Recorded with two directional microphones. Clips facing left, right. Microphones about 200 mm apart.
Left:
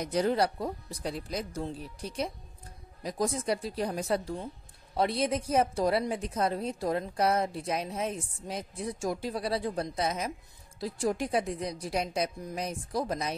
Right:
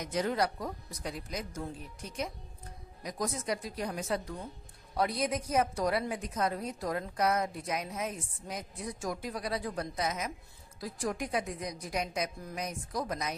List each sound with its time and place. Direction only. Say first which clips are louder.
0.0 s a woman's voice: left 4 dB; 35° left (ahead or behind)